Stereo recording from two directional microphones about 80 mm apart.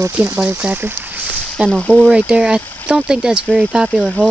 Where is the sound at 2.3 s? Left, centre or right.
Centre.